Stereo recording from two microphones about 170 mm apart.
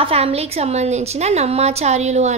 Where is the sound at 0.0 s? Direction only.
35° right (ahead or behind).